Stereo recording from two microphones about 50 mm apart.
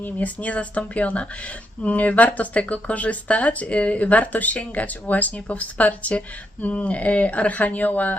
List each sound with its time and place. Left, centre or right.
0.0 s speech: left